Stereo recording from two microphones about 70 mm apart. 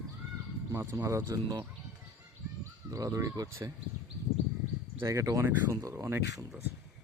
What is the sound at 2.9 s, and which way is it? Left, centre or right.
Speech, right.